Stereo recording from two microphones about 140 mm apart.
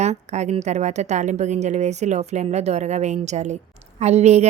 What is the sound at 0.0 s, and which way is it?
A woman's voice, 55° right (ahead or behind).